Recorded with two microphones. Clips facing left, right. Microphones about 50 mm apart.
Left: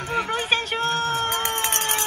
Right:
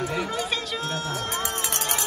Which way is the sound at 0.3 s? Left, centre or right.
Left.